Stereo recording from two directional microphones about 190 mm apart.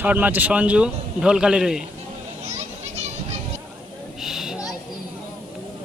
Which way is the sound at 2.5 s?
35° right (ahead or behind).